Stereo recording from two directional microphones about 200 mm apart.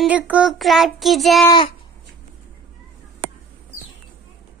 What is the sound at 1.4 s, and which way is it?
Speech, 20° left (ahead or behind).